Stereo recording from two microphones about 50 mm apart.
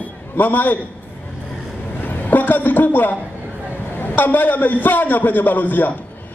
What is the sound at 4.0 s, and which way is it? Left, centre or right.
A man's voice, left.